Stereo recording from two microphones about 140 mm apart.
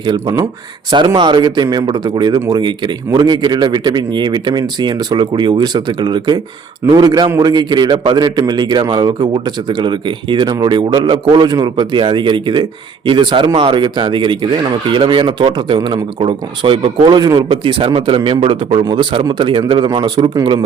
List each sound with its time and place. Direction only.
0.0 s a man's voice: 30° right (ahead or behind)
17.6 s a man's voice: 40° right (ahead or behind)